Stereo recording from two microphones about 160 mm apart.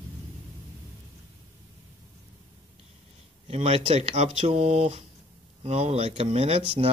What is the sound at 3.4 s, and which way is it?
Speech, 40° right (ahead or behind).